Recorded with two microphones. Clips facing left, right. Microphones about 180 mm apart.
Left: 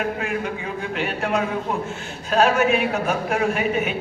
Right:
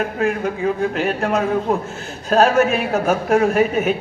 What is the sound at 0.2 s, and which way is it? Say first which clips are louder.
A man's voice: right 6 dB; 40° right (ahead or behind).